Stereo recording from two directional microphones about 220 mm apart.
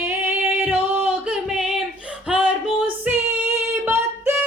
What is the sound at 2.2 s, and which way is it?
Female singing, 5° right (ahead or behind).